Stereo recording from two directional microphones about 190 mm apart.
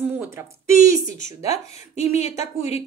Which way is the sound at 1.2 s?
35° left (ahead or behind).